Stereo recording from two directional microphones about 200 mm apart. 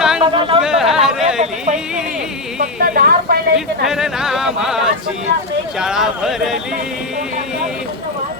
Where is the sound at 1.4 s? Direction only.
35° right (ahead or behind).